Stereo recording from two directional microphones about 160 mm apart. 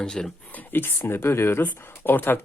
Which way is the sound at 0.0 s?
5° left (ahead or behind).